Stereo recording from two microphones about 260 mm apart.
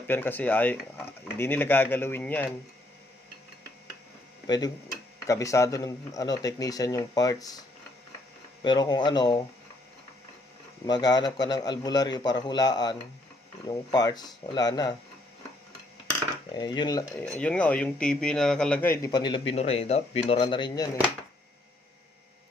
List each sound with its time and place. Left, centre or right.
0.1 s speech: centre
4.4 s speech: centre
8.6 s speech: centre
10.8 s speech: centre
16.5 s speech: centre
17.2 s speech: centre